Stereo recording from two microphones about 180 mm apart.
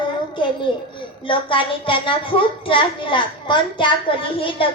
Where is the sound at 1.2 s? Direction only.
30° left (ahead or behind).